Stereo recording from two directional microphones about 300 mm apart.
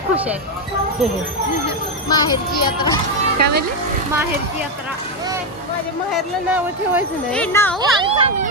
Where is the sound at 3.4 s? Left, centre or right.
Right.